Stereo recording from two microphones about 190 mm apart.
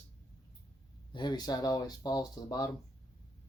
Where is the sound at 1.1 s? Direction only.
20° left (ahead or behind).